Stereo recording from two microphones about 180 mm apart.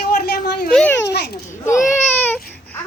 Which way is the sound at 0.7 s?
5° left (ahead or behind).